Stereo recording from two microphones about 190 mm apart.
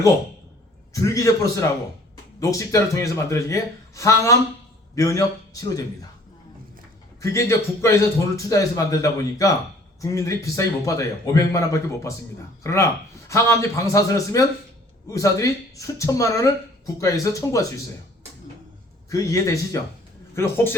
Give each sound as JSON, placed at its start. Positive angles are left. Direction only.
{"t": 0.9, "sound": "speech", "side_deg": 15}
{"t": 7.2, "sound": "speech", "side_deg": 15}
{"t": 19.1, "sound": "speech", "side_deg": 15}